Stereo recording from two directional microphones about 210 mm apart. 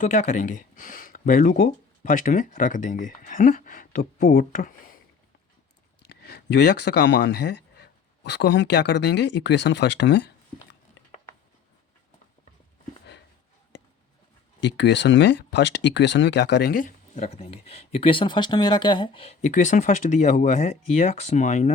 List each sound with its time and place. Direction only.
0.0 s speech: 35° left (ahead or behind)
6.1 s speech: 50° left (ahead or behind)
14.6 s speech: 55° left (ahead or behind); by 21.7 s 35° left (ahead or behind)